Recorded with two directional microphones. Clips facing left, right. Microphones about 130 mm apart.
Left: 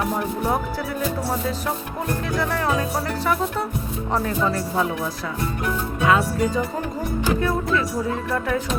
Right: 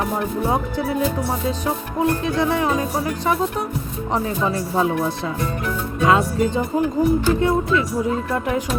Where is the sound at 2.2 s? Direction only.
20° right (ahead or behind).